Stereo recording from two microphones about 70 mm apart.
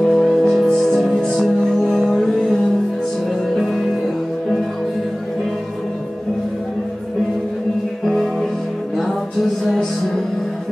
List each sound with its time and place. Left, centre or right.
0.0 s music: centre
8.0 s music: centre